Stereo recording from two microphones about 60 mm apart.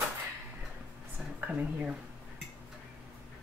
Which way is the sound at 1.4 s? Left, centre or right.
Right.